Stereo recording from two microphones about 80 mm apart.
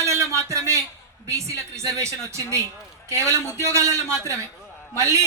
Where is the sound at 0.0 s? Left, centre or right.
Right.